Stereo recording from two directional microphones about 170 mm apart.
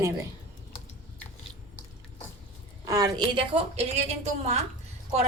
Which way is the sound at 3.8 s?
40° right (ahead or behind).